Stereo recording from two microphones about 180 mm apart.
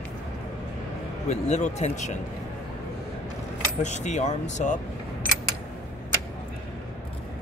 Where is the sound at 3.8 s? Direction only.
40° left (ahead or behind).